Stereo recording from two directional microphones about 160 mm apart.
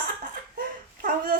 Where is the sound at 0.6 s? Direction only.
60° right (ahead or behind).